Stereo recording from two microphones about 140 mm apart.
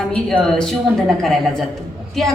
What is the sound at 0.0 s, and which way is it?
A woman's voice, 5° left (ahead or behind).